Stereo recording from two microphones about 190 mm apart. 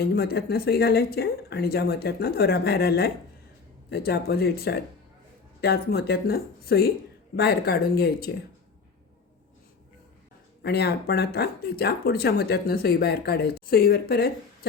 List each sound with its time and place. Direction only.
0.0 s speech: 55° left (ahead or behind)
10.6 s speech: 60° left (ahead or behind)